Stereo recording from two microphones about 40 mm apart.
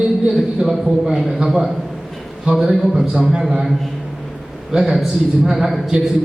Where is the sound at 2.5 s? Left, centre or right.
Right.